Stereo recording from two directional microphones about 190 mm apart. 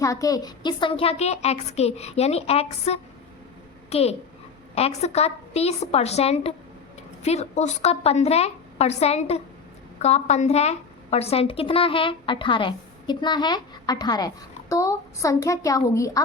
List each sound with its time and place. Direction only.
0.0 s a woman's voice: 20° left (ahead or behind)